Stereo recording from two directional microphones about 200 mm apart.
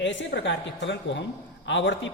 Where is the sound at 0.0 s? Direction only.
65° left (ahead or behind).